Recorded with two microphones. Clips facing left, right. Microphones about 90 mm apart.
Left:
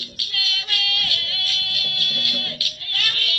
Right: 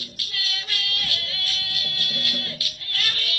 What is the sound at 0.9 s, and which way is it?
Music, 65° left (ahead or behind).